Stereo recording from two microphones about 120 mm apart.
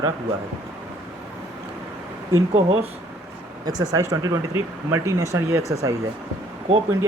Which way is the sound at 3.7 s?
35° right (ahead or behind).